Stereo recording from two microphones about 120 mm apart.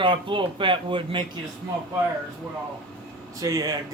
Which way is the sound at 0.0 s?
45° right (ahead or behind).